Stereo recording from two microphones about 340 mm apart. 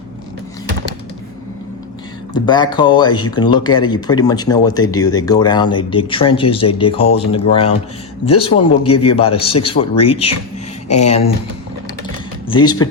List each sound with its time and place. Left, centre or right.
2.3 s speech: centre
12.5 s speech: centre